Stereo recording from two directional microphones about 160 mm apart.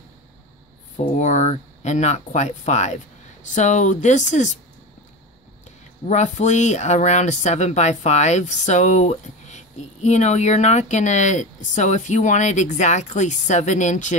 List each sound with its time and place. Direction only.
0.9 s speech: 45° left (ahead or behind)
6.0 s speech: 45° left (ahead or behind)